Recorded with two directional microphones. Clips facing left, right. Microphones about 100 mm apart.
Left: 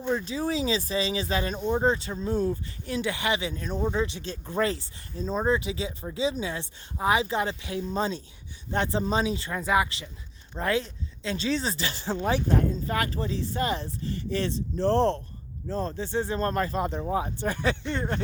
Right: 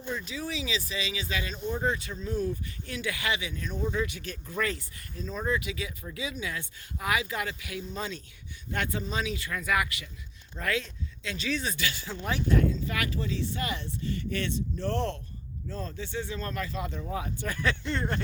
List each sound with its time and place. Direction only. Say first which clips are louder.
0.1 s speech: left 7 dB; 35° left (ahead or behind); by 18.2 s 20° left (ahead or behind)